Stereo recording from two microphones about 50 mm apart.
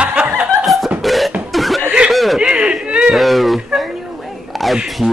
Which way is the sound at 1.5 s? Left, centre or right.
Centre.